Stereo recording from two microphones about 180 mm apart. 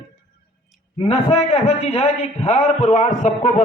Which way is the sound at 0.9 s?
30° left (ahead or behind).